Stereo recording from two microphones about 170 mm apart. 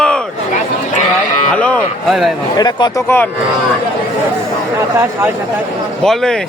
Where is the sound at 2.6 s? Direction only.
25° left (ahead or behind).